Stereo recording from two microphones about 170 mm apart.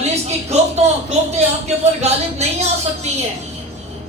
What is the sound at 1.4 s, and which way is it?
A woman's voice, 40° right (ahead or behind).